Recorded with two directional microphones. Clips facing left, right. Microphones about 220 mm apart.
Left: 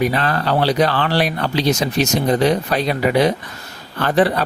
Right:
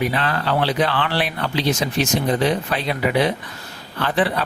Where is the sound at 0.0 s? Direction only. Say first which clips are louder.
Left 3 dB; 40° left (ahead or behind).